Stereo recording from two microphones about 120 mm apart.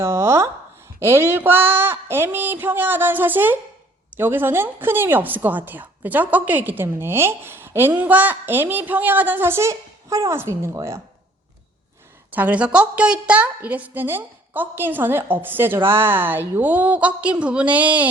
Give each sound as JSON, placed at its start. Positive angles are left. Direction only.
{"t": 0.0, "sound": "a woman's voice", "side_deg": -20}
{"t": 12.3, "sound": "a woman's voice", "side_deg": -15}